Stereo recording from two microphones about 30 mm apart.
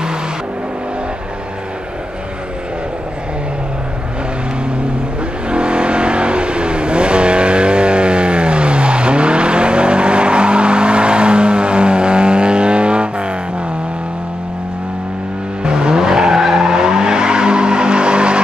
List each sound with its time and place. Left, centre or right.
5.5 s vehicle: right
15.6 s vehicle: right